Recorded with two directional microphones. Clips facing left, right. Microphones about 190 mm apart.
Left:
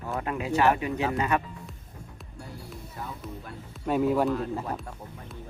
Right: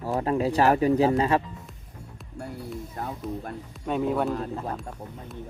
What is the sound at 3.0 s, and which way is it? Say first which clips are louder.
Speech: right 4 dB; 55° right (ahead or behind).